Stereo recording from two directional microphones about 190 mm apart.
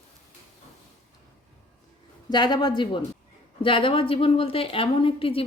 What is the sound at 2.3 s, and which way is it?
A woman's voice, 20° left (ahead or behind).